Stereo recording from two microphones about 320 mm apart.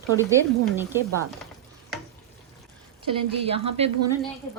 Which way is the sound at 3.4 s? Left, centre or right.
Centre.